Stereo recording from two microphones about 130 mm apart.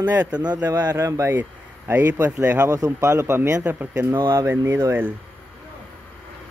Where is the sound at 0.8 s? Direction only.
20° right (ahead or behind).